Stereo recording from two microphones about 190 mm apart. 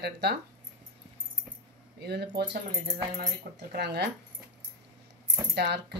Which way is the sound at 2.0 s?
60° right (ahead or behind).